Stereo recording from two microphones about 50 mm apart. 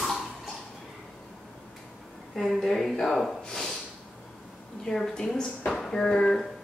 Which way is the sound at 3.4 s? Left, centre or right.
Centre.